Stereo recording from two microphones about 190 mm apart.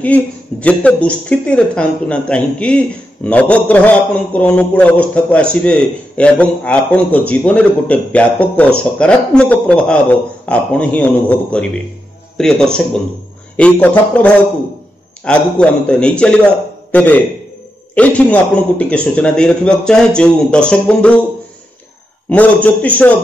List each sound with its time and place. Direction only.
0.0 s a man's voice: 10° left (ahead or behind)
22.3 s a man's voice: 10° left (ahead or behind)